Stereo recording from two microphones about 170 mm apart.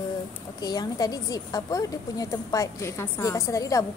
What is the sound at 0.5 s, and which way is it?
Speech, 25° left (ahead or behind).